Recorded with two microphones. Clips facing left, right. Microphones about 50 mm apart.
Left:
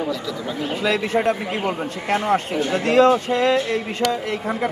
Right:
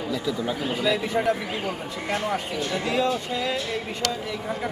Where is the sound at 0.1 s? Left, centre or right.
Centre.